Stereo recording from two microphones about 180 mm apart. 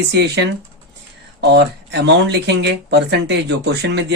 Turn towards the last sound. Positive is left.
turn(degrees=-75)  # may be behind; listen again after turning